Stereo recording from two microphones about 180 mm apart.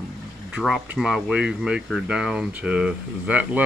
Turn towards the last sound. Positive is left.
turn(degrees=-5)  # may be behind; listen again after turning